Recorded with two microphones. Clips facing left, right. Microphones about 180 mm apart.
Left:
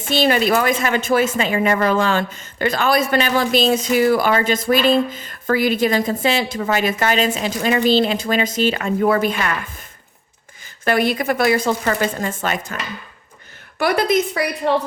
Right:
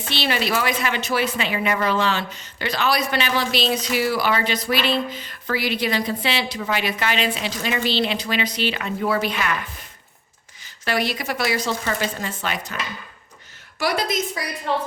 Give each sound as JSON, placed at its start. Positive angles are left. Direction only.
{"t": 0.1, "sound": "speech", "side_deg": 45}
{"t": 10.8, "sound": "speech", "side_deg": 50}
{"t": 13.7, "sound": "a woman's voice", "side_deg": 55}